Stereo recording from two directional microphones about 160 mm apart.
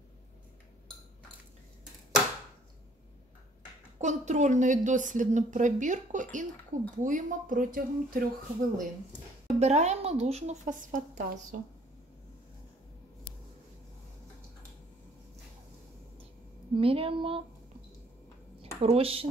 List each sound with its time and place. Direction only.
4.0 s a woman's voice: 45° right (ahead or behind)
9.6 s a woman's voice: 45° right (ahead or behind)
16.7 s a woman's voice: 35° right (ahead or behind)
18.8 s a woman's voice: 35° right (ahead or behind)